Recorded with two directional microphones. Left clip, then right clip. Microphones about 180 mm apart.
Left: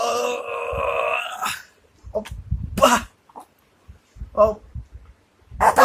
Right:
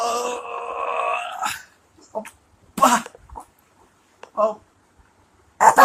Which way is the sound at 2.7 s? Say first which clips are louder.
Even; 60° left (ahead or behind).